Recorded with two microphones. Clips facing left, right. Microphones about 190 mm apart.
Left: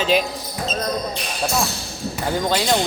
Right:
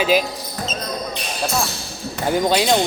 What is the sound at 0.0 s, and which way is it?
Speech, 5° right (ahead or behind).